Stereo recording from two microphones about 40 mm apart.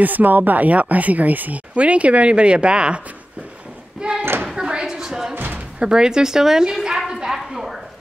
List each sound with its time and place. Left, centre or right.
0.0 s speech: right
1.8 s speech: right
4.2 s a sound: right
4.6 s a sound: right
5.3 s music: right
5.8 s speech: centre